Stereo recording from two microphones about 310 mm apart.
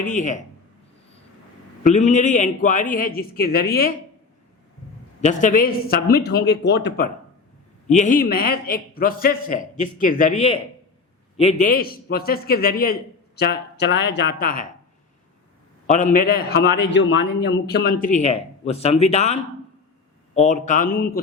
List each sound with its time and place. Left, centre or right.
0.0 s a man's voice: left
1.8 s a man's voice: left
5.2 s a man's voice: left
15.9 s a man's voice: left